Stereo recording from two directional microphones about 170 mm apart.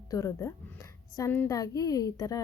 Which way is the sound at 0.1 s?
20° left (ahead or behind).